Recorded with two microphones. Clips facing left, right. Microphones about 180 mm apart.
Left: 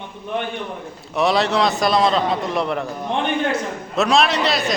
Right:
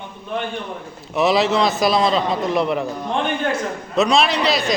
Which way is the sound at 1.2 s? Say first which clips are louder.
Right 1 dB; centre (ahead or behind).